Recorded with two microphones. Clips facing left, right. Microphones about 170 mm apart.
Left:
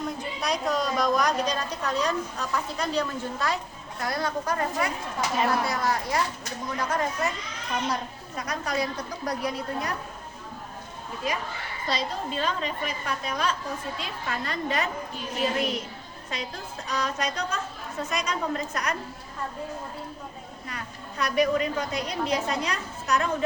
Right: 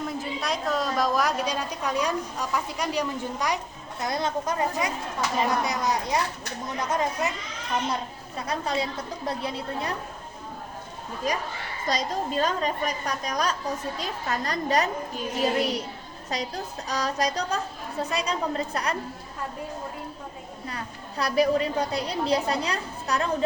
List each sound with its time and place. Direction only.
0.2 s a woman's voice: centre (ahead or behind); by 7.1 s 20° right (ahead or behind)
8.4 s a woman's voice: 25° right (ahead or behind)
11.2 s a child's voice: 45° right (ahead or behind)
20.7 s a woman's voice: 35° right (ahead or behind)